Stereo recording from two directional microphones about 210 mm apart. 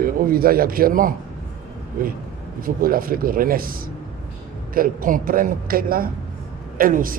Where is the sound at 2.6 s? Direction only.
40° right (ahead or behind).